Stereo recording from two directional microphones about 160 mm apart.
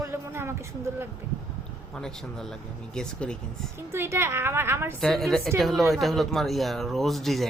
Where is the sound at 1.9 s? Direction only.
5° left (ahead or behind).